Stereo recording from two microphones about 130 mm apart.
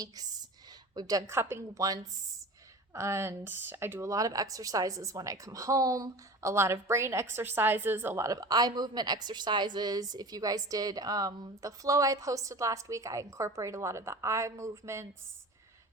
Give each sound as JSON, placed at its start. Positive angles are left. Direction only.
{"t": 0.9, "sound": "speech", "side_deg": -30}